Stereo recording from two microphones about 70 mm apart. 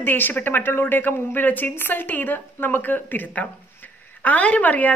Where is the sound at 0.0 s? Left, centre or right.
Left.